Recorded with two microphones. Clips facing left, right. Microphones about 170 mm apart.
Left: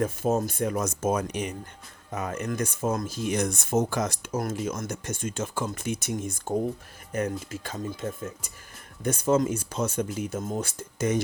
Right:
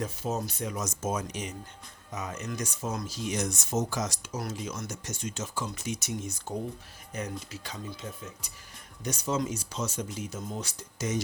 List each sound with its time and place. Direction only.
0.0 s speech: 50° left (ahead or behind)